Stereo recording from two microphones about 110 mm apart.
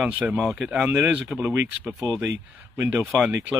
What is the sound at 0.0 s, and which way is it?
Speech, 15° right (ahead or behind).